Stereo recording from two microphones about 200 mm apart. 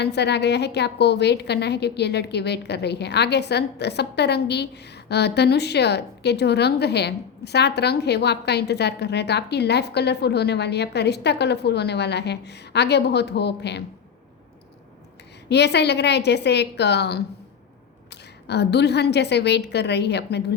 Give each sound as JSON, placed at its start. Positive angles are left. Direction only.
{"t": 0.0, "sound": "a woman's voice", "side_deg": 55}
{"t": 15.4, "sound": "a woman's voice", "side_deg": 55}
{"t": 18.4, "sound": "a woman's voice", "side_deg": 55}